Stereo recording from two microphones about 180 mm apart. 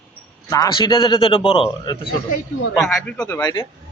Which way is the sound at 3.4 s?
20° left (ahead or behind).